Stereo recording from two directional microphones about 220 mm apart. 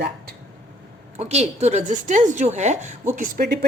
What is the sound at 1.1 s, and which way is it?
Speech, 30° right (ahead or behind).